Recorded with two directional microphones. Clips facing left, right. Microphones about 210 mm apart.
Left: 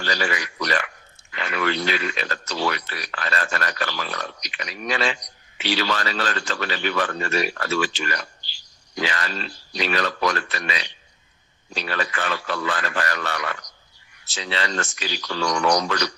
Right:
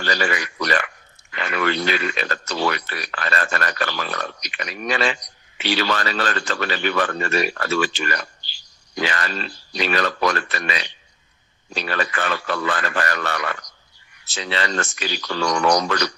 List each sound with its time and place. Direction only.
0.0 s speech: 55° right (ahead or behind)